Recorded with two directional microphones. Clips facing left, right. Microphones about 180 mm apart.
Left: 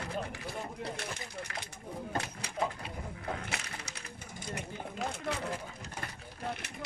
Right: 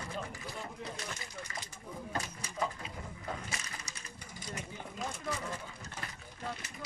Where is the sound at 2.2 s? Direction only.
65° left (ahead or behind).